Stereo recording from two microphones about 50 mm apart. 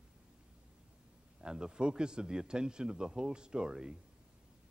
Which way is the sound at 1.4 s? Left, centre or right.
Centre.